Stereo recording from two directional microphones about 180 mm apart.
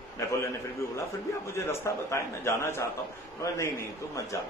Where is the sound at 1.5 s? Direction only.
15° left (ahead or behind).